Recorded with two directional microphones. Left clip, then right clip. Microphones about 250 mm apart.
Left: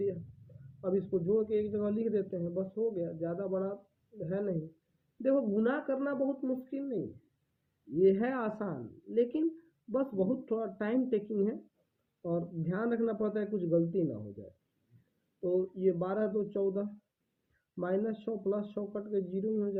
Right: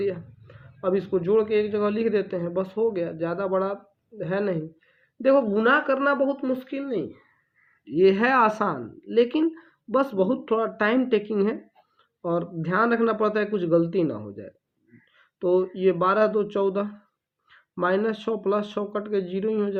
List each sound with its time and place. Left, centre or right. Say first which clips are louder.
0.8 s a man's voice: right 8 dB; centre
12.2 s a man's voice: right 9 dB; centre
15.4 s a man's voice: right 9 dB; right